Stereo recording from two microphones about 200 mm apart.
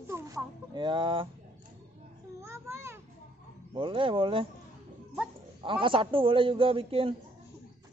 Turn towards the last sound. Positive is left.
turn(degrees=-30)  # may be behind; listen again after turning